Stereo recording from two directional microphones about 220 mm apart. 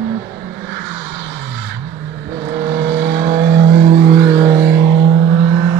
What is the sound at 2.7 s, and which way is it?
Vehicle, 45° right (ahead or behind).